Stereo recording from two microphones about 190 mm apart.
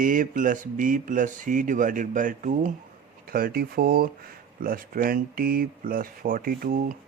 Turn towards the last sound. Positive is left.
turn(degrees=-50)  # may be behind; listen again after turning